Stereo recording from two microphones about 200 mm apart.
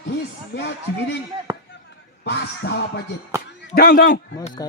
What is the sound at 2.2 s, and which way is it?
A man's voice, 55° left (ahead or behind).